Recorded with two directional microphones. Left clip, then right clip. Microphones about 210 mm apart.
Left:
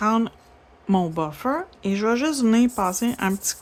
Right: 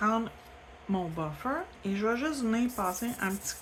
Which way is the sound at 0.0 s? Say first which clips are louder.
Left 7 dB; 50° left (ahead or behind).